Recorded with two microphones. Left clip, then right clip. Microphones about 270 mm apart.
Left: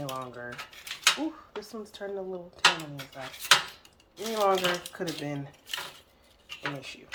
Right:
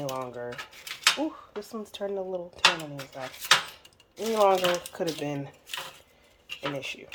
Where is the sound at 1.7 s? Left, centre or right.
Right.